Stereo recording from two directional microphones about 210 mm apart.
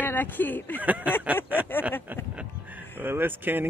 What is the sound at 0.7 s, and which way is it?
Speech, 5° right (ahead or behind).